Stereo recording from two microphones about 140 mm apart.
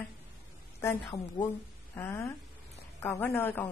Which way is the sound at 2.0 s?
20° left (ahead or behind).